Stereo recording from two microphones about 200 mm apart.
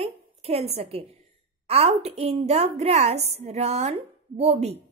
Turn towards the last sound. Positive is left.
turn(degrees=-30)  # may be behind; listen again after turning